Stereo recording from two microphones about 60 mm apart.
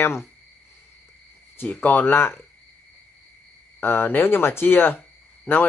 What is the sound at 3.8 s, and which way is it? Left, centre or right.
Speech, left.